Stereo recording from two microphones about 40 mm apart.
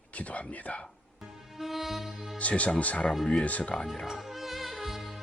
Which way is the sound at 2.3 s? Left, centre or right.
Left.